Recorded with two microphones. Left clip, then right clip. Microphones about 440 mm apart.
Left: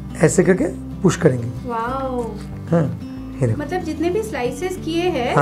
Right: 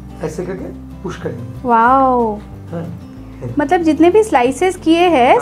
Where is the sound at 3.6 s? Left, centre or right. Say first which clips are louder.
Right 16 dB; right.